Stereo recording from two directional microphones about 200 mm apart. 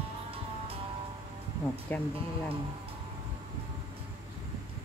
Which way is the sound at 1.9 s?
10° left (ahead or behind).